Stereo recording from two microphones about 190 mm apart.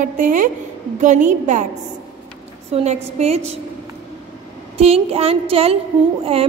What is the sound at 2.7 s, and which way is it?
Speech, 35° right (ahead or behind).